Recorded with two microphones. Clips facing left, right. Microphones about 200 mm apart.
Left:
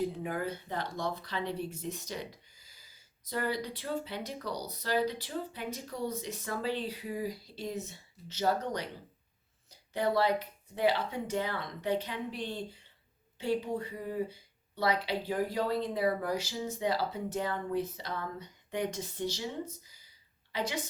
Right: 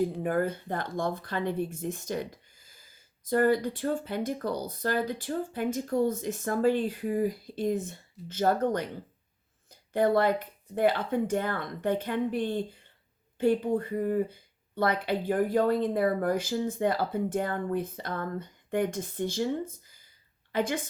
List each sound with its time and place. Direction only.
0.2 s speech: 50° right (ahead or behind)